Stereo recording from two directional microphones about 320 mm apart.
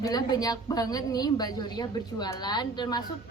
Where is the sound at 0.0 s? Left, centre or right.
Centre.